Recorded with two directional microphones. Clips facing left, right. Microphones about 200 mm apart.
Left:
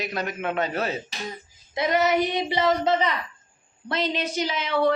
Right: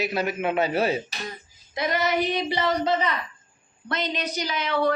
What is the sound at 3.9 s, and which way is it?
Child singing, 30° left (ahead or behind).